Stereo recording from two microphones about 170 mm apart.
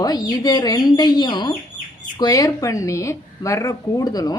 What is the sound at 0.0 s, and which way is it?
A woman's voice, 20° left (ahead or behind).